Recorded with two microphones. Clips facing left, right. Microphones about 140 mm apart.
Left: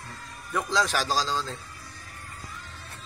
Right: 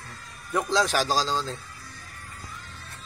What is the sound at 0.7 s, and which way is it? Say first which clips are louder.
Speech: right 2 dB; 25° right (ahead or behind).